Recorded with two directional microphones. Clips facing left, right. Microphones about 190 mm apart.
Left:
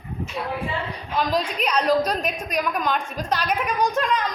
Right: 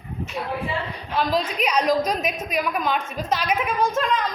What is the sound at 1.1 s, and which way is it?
A woman's voice, 5° right (ahead or behind).